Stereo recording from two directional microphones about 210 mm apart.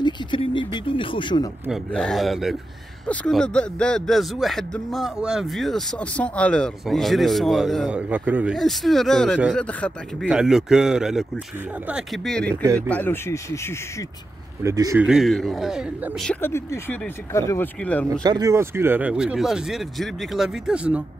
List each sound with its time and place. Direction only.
0.0 s a sound: 25° left (ahead or behind)
0.7 s speech: 25° left (ahead or behind)
1.7 s speech: 5° left (ahead or behind)
14.6 s speech: 15° right (ahead or behind)
15.0 s speech: centre (ahead or behind)
16.3 s speech: 10° left (ahead or behind)
18.2 s speech: 15° right (ahead or behind)